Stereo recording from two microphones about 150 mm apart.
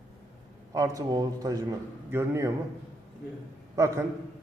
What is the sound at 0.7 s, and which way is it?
A man's voice, 25° right (ahead or behind).